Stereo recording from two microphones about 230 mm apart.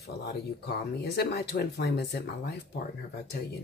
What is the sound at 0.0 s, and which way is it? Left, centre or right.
Speech, left.